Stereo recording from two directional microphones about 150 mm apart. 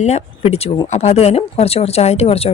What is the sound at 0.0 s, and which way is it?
Speech, 50° left (ahead or behind).